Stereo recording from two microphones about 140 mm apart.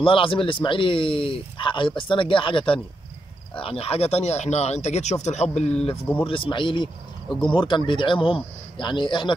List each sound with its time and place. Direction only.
0.0 s speech: 40° left (ahead or behind); by 5.7 s 55° left (ahead or behind)
6.2 s speech: 40° left (ahead or behind)